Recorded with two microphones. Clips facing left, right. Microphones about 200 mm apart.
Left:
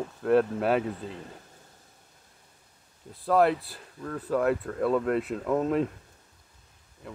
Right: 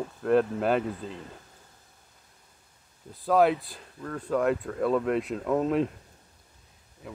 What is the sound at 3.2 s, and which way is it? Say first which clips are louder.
Speech: right 1 dB; centre (ahead or behind).